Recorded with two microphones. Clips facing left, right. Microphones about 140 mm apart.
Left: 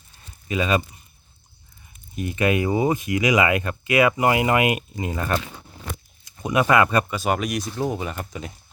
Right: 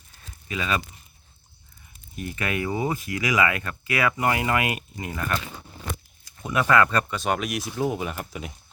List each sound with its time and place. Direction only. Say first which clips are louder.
0.4 s speech: left 6 dB; 25° left (ahead or behind)
2.1 s speech: left 7 dB; 20° left (ahead or behind)
6.2 s speech: left 4 dB; 20° left (ahead or behind); by 8.5 s 5° right (ahead or behind)